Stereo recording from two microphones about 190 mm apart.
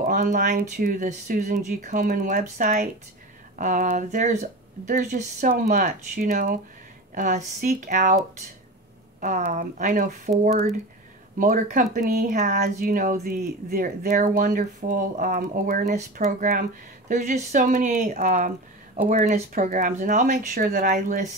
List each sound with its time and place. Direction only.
0.0 s speech: 50° right (ahead or behind)
9.5 s speech: 45° right (ahead or behind)